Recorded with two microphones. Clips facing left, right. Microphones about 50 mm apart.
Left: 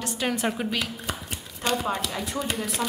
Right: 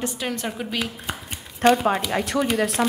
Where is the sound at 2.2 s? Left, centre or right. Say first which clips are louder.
Right 7 dB; right.